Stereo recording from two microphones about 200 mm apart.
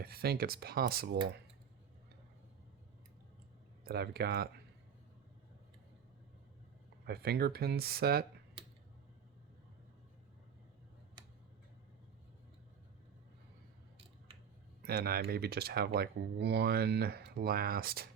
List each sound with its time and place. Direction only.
0.0 s speech: 50° right (ahead or behind)
3.8 s speech: 50° right (ahead or behind)
7.0 s speech: 50° right (ahead or behind)
14.8 s speech: 50° right (ahead or behind)